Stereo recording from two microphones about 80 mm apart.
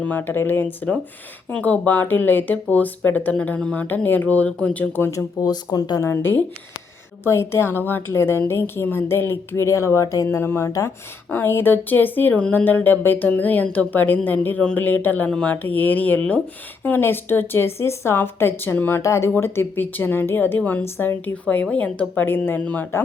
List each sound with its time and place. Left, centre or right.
0.0 s a woman's voice: left
5.1 s speech: left
6.0 s a woman's voice: left
10.3 s a woman's voice: left
11.3 s a woman's voice: left; by 15.5 s centre
15.6 s a woman's voice: left